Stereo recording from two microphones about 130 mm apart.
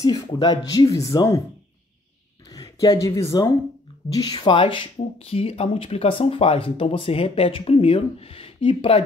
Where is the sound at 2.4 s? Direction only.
30° left (ahead or behind).